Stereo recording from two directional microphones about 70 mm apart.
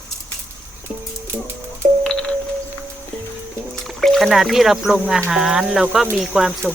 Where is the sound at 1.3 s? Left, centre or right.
Right.